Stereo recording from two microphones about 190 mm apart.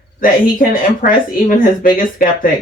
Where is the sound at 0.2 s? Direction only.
45° left (ahead or behind).